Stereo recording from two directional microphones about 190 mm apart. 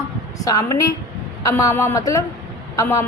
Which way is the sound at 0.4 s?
20° left (ahead or behind).